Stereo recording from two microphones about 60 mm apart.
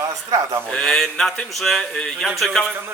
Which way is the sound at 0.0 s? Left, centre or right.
Right.